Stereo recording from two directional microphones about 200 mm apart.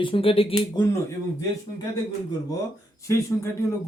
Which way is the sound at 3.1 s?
15° left (ahead or behind).